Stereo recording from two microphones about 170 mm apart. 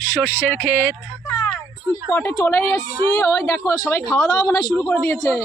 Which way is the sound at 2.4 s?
10° left (ahead or behind).